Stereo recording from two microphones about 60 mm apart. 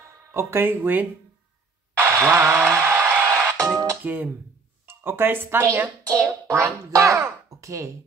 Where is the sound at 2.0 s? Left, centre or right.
Right.